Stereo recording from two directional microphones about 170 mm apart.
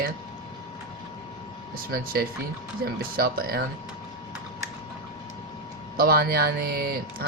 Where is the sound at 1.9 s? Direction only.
60° right (ahead or behind).